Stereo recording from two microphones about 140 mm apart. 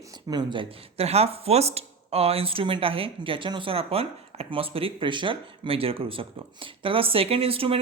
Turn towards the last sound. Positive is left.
turn(degrees=-40)  # may be behind; listen again after turning